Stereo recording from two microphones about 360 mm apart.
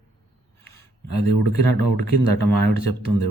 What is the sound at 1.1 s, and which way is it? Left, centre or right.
Speech, right.